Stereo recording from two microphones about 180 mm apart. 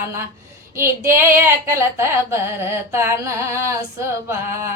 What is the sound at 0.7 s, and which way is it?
Female singing, 15° right (ahead or behind).